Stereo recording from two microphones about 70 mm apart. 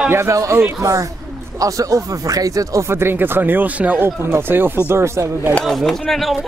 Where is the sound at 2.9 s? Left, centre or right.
Right.